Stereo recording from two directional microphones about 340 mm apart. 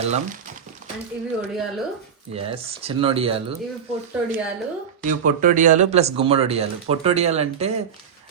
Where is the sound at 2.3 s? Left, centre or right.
Centre.